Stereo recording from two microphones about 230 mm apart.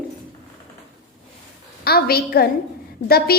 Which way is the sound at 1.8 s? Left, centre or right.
Left.